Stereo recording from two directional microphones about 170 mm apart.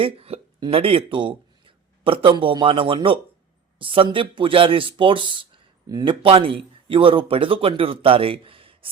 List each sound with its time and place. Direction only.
0.0 s speech: 35° right (ahead or behind)